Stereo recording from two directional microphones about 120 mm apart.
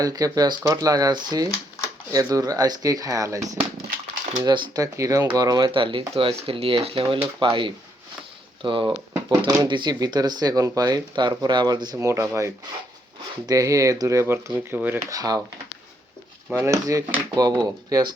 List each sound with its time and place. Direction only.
0.0 s speech: 30° right (ahead or behind)
4.4 s speech: 40° right (ahead or behind)
9.3 s speech: 35° right (ahead or behind)
11.9 s speech: 25° right (ahead or behind)
15.1 s speech: 30° right (ahead or behind)
16.5 s speech: 20° right (ahead or behind)